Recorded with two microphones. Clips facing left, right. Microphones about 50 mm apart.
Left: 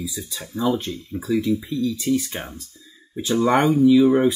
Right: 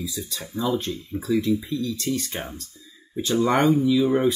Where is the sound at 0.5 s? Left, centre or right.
Left.